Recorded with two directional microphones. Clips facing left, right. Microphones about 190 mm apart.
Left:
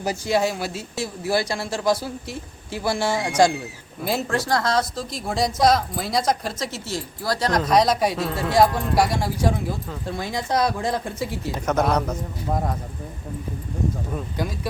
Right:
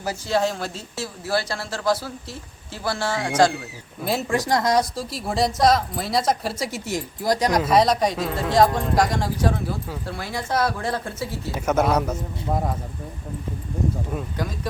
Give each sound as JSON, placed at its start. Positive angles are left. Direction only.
{"t": 0.0, "sound": "speech", "side_deg": 15}
{"t": 4.0, "sound": "a woman's voice", "side_deg": 0}
{"t": 4.3, "sound": "a woman's voice", "side_deg": -15}
{"t": 11.5, "sound": "a woman's voice", "side_deg": -5}